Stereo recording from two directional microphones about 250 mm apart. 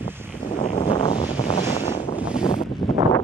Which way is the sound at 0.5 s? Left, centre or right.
Left.